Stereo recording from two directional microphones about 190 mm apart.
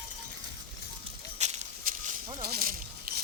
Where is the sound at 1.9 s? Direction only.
50° right (ahead or behind).